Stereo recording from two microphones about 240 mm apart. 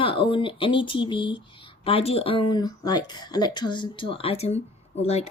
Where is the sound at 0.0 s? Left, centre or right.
Left.